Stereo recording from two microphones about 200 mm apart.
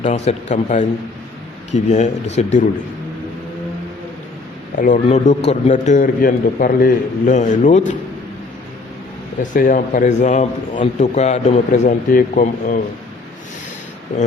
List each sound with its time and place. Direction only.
0.0 s a man's voice: 35° left (ahead or behind)
4.8 s a man's voice: 35° left (ahead or behind)
9.4 s a man's voice: 40° left (ahead or behind)